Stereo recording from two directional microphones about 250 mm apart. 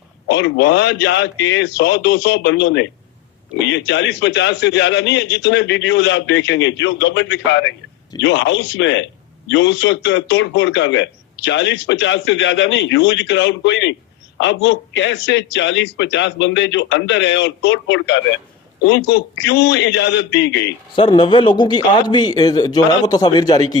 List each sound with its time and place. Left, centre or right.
0.3 s a man's voice: left
20.9 s a man's voice: centre